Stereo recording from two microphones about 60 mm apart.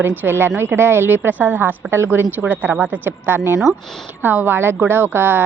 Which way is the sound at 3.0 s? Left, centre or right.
Right.